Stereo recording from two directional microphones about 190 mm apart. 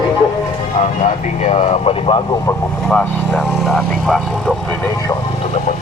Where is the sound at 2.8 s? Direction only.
5° left (ahead or behind).